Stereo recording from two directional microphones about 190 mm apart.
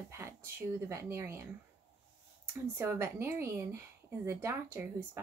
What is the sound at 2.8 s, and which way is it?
Speech, 15° right (ahead or behind).